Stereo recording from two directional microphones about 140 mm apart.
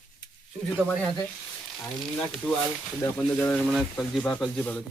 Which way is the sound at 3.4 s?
5° left (ahead or behind).